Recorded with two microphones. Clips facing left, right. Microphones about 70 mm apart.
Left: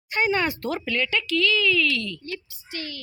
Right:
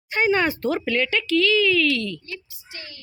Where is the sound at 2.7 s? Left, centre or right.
Left.